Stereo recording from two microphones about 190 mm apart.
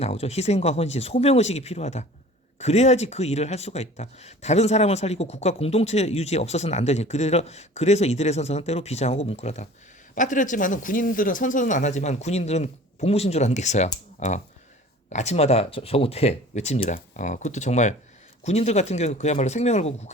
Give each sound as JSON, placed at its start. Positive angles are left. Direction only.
{"t": 0.0, "sound": "speech", "side_deg": 35}